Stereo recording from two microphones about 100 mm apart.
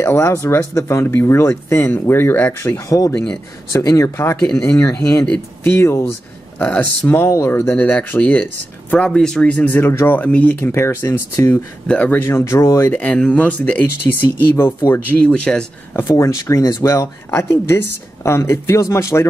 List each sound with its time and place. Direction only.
0.0 s speech: 25° left (ahead or behind); by 3.3 s 10° left (ahead or behind)
3.7 s speech: 30° left (ahead or behind)
6.6 s speech: 15° left (ahead or behind)
13.0 s speech: 10° left (ahead or behind)
14.0 s speech: 25° left (ahead or behind)
15.1 s speech: 10° left (ahead or behind)
16.0 s speech: 30° left (ahead or behind)